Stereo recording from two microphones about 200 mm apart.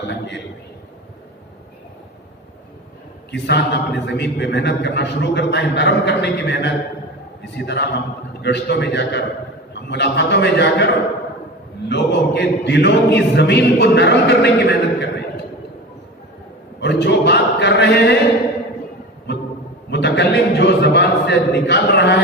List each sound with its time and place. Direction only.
3.3 s choir: 60° left (ahead or behind)
11.9 s choir: 55° left (ahead or behind)
16.8 s a sound: 60° left (ahead or behind)
19.9 s a man's voice: 60° left (ahead or behind)